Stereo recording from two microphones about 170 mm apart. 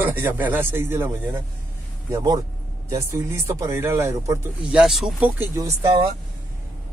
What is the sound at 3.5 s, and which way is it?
Speech, 15° right (ahead or behind).